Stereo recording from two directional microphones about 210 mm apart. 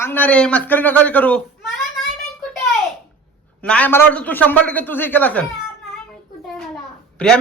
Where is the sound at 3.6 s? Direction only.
5° left (ahead or behind).